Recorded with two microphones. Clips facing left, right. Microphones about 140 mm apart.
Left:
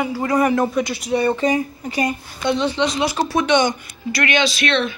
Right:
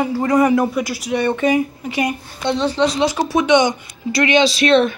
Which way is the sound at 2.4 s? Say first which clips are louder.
Right 2 dB; 35° right (ahead or behind).